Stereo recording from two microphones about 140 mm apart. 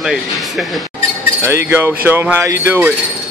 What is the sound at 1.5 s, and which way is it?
Speech, 15° right (ahead or behind).